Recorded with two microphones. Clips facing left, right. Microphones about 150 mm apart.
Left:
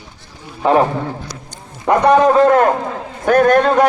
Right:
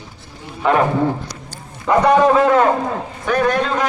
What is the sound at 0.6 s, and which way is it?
Speech, 30° left (ahead or behind).